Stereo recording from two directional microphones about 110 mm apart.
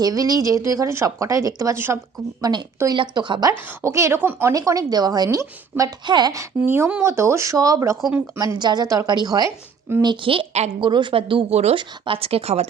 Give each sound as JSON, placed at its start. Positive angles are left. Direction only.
{"t": 0.0, "sound": "speech", "side_deg": -30}
{"t": 2.4, "sound": "speech", "side_deg": -40}
{"t": 3.8, "sound": "speech", "side_deg": -25}
{"t": 4.5, "sound": "speech", "side_deg": -30}
{"t": 6.1, "sound": "speech", "side_deg": -40}
{"t": 6.3, "sound": "speech", "side_deg": -25}
{"t": 10.0, "sound": "speech", "side_deg": -45}